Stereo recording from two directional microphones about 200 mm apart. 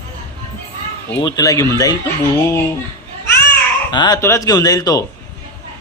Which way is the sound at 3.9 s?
20° left (ahead or behind).